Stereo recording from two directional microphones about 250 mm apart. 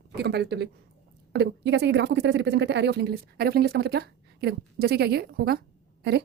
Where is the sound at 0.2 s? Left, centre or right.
Right.